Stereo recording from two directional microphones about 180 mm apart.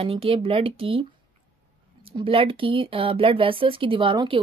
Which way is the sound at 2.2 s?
30° right (ahead or behind).